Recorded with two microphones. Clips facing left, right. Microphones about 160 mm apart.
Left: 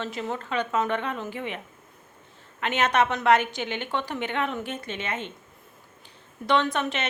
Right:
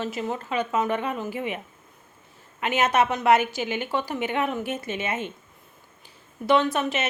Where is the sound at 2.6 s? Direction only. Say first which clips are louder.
Right 1 dB; 5° right (ahead or behind).